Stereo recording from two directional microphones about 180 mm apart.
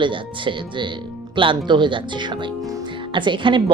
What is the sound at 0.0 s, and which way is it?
Speech, 25° right (ahead or behind).